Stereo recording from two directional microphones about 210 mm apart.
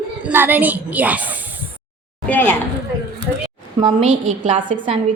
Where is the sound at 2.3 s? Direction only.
10° left (ahead or behind).